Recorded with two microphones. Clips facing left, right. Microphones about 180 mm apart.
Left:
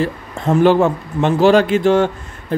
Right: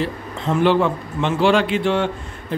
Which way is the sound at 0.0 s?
45° left (ahead or behind).